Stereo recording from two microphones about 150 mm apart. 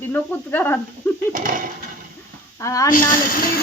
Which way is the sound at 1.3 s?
65° right (ahead or behind).